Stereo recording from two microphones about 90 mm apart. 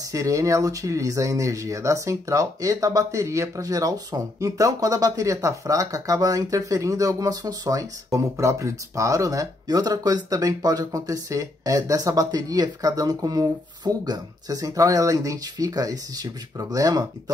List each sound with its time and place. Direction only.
0.0 s speech: 40° right (ahead or behind)